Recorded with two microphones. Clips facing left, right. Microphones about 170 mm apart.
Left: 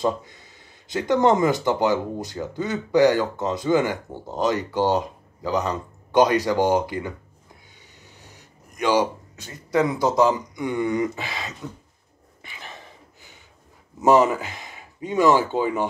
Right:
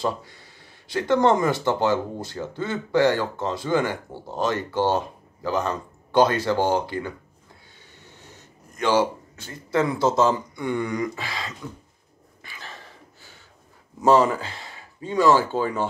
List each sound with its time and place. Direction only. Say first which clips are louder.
0.0 s speech: left 3 dB; 20° left (ahead or behind)
8.4 s a man's voice: left 1 dB; 15° left (ahead or behind)
12.4 s a sound: left 1 dB; 20° left (ahead or behind)
14.0 s speech: left 1 dB; 15° left (ahead or behind)